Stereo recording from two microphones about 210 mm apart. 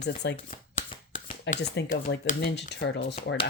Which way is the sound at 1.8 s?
60° left (ahead or behind).